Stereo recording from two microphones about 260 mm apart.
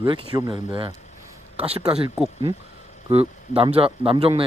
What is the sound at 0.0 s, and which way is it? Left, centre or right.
Speech, centre.